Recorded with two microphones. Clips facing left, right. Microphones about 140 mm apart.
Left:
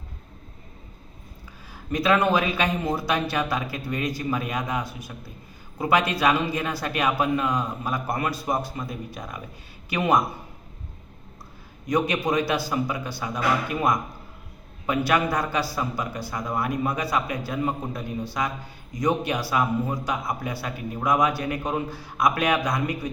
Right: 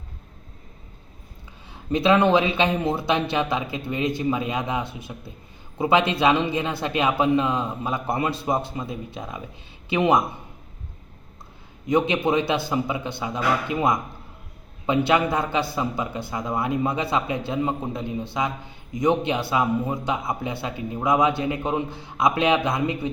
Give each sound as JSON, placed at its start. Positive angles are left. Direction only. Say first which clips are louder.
{"t": 1.7, "sound": "a man's voice", "louder": "right 3 dB", "side_deg": -25}
{"t": 11.9, "sound": "a man's voice", "louder": "right 3 dB", "side_deg": -25}